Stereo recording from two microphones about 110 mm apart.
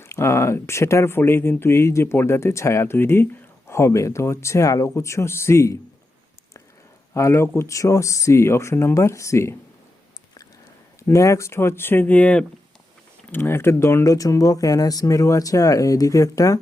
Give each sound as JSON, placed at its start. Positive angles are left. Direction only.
{"t": 0.0, "sound": "speech", "side_deg": 25}
{"t": 7.1, "sound": "speech", "side_deg": 25}
{"t": 11.0, "sound": "speech", "side_deg": 25}